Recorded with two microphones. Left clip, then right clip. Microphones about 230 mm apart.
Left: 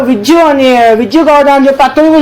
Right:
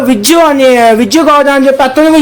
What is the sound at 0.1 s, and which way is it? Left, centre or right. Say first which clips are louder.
Speech: even; right.